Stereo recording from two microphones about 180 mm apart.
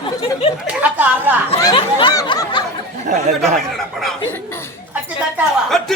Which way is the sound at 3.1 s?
45° right (ahead or behind).